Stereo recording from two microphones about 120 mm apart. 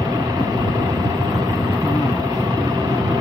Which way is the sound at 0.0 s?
25° right (ahead or behind).